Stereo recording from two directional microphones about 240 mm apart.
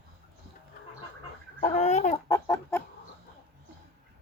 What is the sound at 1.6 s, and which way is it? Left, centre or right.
Babbling, left.